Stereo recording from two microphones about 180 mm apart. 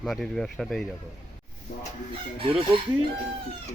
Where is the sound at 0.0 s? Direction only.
Centre (ahead or behind).